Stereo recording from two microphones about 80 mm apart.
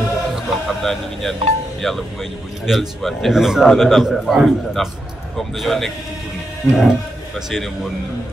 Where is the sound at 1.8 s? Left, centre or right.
Centre.